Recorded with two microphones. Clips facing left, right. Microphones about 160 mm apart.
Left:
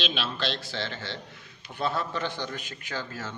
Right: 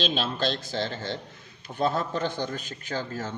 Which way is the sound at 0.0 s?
45° right (ahead or behind).